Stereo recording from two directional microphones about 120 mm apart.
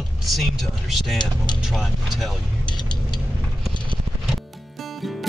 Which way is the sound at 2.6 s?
40° left (ahead or behind).